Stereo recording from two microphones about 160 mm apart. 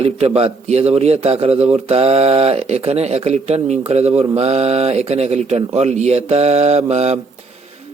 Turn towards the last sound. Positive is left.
turn(degrees=-40)  # may be behind; listen again after turning